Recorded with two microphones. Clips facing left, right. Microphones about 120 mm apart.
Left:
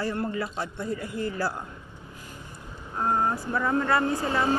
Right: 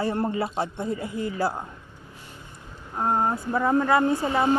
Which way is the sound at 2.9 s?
20° right (ahead or behind).